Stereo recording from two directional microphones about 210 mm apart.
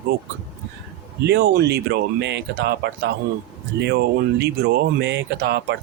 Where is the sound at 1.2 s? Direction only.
50° right (ahead or behind).